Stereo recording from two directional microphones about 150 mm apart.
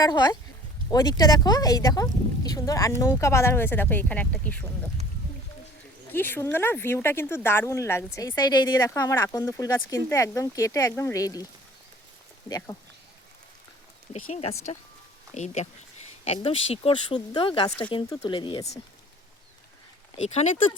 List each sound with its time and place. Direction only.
0.0 s speech: 25° left (ahead or behind); by 4.6 s 10° left (ahead or behind)
6.1 s speech: 15° left (ahead or behind)
12.5 s speech: 25° left (ahead or behind)
14.1 s speech: 45° left (ahead or behind)
16.3 s speech: 40° left (ahead or behind)
20.2 s speech: 50° left (ahead or behind)